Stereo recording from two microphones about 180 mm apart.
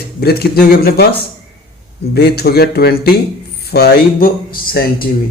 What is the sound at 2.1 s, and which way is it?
A man's voice, 60° left (ahead or behind).